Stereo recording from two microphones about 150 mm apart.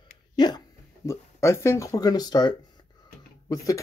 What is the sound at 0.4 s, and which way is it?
Speech, 30° left (ahead or behind).